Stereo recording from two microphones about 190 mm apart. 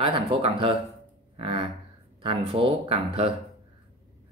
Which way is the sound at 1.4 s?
30° right (ahead or behind).